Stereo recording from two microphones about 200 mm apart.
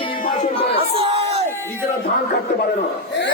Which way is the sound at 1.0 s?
30° right (ahead or behind).